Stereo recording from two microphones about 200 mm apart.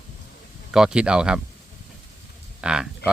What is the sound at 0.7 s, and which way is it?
Speech, 5° right (ahead or behind).